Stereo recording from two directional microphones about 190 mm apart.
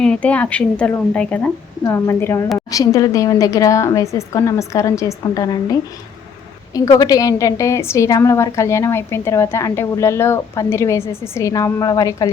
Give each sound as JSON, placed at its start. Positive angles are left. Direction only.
{"t": 0.0, "sound": "a woman's voice", "side_deg": 5}
{"t": 6.7, "sound": "a woman's voice", "side_deg": 20}